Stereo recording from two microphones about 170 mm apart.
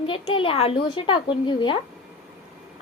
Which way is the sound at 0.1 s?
30° left (ahead or behind).